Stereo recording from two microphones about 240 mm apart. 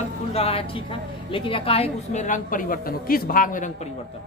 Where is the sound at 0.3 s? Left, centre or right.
Left.